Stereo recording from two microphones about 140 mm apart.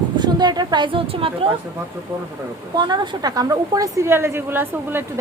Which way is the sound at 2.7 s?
30° right (ahead or behind).